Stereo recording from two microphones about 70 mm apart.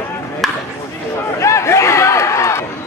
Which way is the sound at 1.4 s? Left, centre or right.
Left.